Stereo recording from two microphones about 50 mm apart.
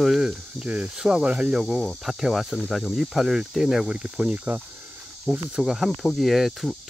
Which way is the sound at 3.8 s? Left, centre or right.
Centre.